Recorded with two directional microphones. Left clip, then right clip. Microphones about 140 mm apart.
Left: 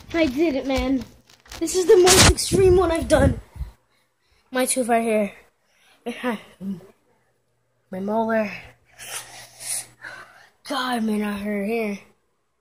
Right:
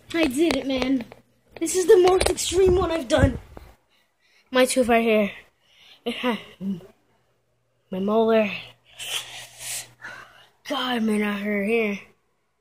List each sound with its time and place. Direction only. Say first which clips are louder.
0.1 s a woman's voice: left 1 dB; 25° right (ahead or behind)
1.6 s speech: left 1 dB; 10° right (ahead or behind)
2.7 s a woman's voice: left 4 dB; 40° left (ahead or behind)
4.3 s a sound: right 4 dB; 15° right (ahead or behind)
8.3 s a woman's voice: right 3 dB; 25° right (ahead or behind)
8.9 s a sound: right 6 dB; 15° right (ahead or behind); by 11.0 s 5° left (ahead or behind)
11.0 s speech: right 1 dB; 15° right (ahead or behind)